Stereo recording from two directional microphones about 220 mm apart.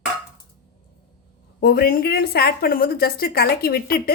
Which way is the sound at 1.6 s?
45° left (ahead or behind).